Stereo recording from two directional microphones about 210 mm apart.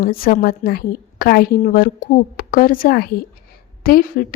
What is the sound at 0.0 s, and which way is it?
A woman's voice, 45° left (ahead or behind).